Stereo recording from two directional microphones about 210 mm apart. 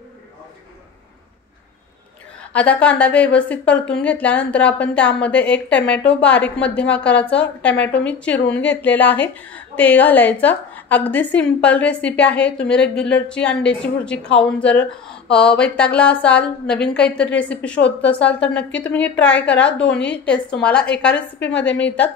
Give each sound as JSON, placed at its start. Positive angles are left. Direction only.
{"t": 2.5, "sound": "a woman's voice", "side_deg": 5}
{"t": 21.5, "sound": "a woman's voice", "side_deg": 55}
{"t": 21.7, "sound": "a woman's voice", "side_deg": 5}